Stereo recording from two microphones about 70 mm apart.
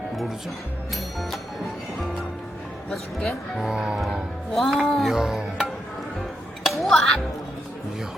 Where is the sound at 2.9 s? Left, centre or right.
Centre.